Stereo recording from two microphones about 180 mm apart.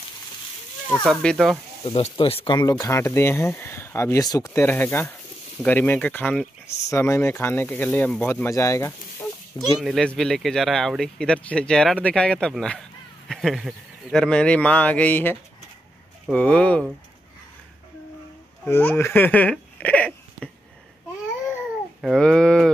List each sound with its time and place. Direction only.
0.9 s speech: 5° left (ahead or behind)
1.9 s speech: 35° left (ahead or behind); by 8.9 s 15° left (ahead or behind)
9.8 s speech: centre (ahead or behind)
18.7 s speech: 10° left (ahead or behind)
22.0 s a sound: 5° left (ahead or behind)